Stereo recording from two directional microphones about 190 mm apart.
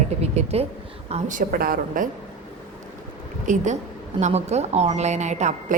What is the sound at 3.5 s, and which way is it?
A woman's voice, 40° right (ahead or behind).